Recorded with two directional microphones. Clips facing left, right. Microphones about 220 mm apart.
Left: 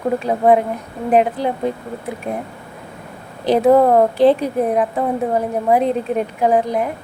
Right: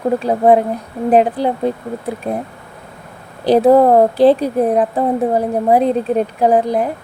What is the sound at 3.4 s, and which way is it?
Speech, 35° right (ahead or behind).